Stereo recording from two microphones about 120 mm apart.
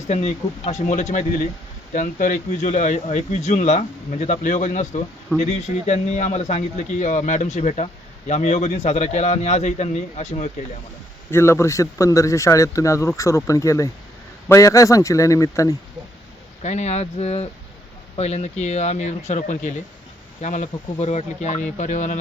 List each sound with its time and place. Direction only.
0.1 s a man's voice: 65° left (ahead or behind); by 5.0 s 85° left
5.4 s a man's voice: 70° left (ahead or behind)
11.3 s a man's voice: 20° left (ahead or behind)
16.6 s a man's voice: 70° left (ahead or behind); by 22.2 s 90° left